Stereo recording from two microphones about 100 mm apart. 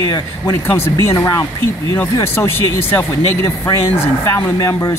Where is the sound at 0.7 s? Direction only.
25° left (ahead or behind).